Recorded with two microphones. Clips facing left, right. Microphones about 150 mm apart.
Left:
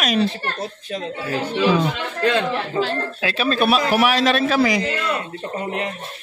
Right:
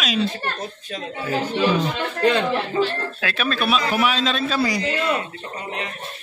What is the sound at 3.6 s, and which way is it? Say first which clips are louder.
Speech: left 4 dB; 55° left (ahead or behind).